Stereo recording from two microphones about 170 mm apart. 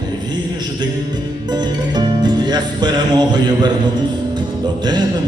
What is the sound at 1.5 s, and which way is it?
Music, 25° right (ahead or behind).